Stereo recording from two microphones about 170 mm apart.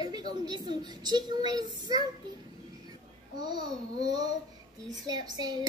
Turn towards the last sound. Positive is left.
turn(degrees=-25)  # may be behind; listen again after turning